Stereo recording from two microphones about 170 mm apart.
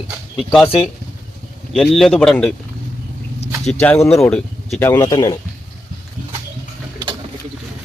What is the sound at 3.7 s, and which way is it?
Speech, 10° left (ahead or behind).